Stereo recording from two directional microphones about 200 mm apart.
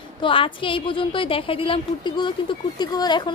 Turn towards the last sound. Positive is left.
turn(degrees=20)  # may be behind; listen again after turning